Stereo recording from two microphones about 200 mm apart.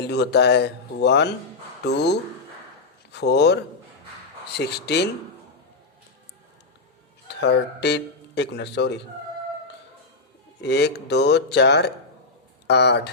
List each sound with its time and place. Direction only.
0.0 s speech: 55° left (ahead or behind)
7.3 s speech: 60° left (ahead or behind)
10.6 s speech: 55° left (ahead or behind)